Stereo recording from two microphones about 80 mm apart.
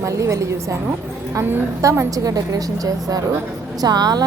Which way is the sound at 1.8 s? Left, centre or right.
Right.